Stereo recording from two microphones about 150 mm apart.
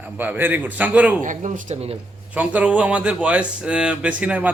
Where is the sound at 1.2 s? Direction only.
60° right (ahead or behind).